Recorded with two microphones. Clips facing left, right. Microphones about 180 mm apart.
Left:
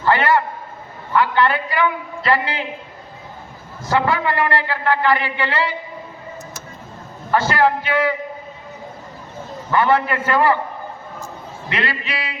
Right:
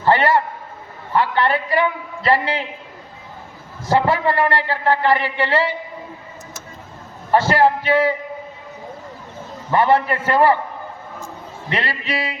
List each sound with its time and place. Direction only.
0.0 s a sound: 30° right (ahead or behind)
1.1 s a man's voice: 30° right (ahead or behind)
3.8 s a man's voice: 30° right (ahead or behind)
7.3 s a man's voice: 30° right (ahead or behind)
9.7 s a man's voice: 30° right (ahead or behind)
11.7 s a man's voice: 35° right (ahead or behind)